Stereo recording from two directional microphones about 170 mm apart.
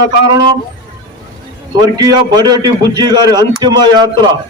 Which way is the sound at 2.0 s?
25° right (ahead or behind).